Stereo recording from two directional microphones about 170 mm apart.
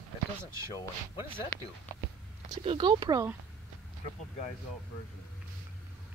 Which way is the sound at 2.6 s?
30° right (ahead or behind).